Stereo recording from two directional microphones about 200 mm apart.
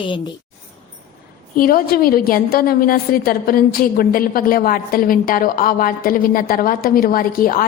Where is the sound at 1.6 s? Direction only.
45° left (ahead or behind).